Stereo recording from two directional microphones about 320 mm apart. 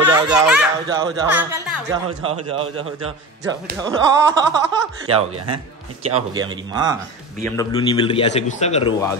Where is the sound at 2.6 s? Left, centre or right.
Right.